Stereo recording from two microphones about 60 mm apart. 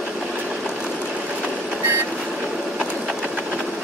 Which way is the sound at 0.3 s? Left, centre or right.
Centre.